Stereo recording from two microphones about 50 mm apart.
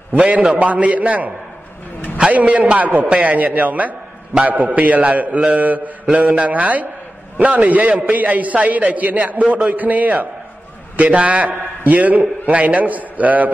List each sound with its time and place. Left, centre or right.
0.6 s a man's voice: right
2.3 s a man's voice: right